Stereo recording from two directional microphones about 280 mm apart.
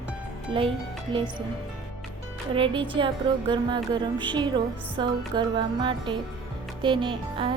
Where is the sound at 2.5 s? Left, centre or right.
Centre.